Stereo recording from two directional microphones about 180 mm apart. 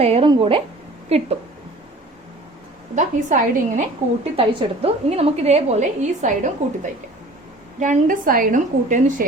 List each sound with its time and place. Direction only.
0.0 s a woman's voice: 35° right (ahead or behind)
2.9 s a woman's voice: 45° right (ahead or behind)